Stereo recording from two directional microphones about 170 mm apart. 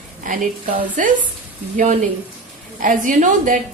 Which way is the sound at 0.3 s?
50° right (ahead or behind).